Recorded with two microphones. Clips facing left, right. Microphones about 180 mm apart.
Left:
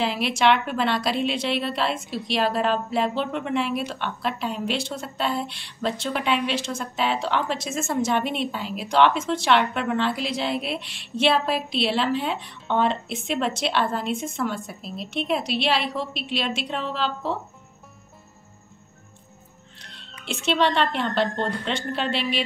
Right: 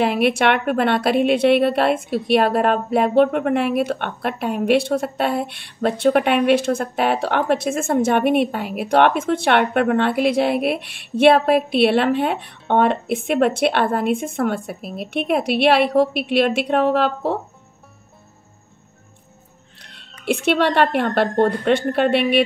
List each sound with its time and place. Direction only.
0.0 s a woman's voice: 60° right (ahead or behind)
20.0 s a woman's voice: 60° right (ahead or behind)